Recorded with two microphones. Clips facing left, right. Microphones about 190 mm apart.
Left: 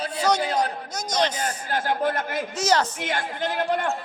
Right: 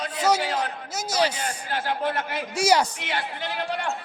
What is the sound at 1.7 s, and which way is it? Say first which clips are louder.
Speech: left 2 dB; 45° left (ahead or behind).